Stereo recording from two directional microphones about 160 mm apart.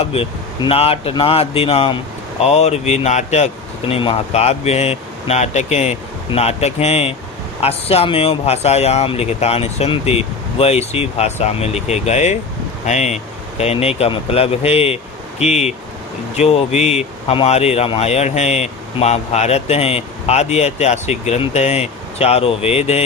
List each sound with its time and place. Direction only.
0.0 s speech: 35° left (ahead or behind)